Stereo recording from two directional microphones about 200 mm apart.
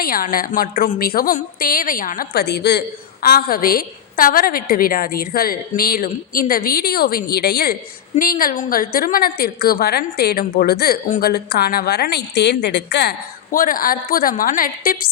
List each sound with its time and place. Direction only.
0.0 s a woman's voice: 45° left (ahead or behind)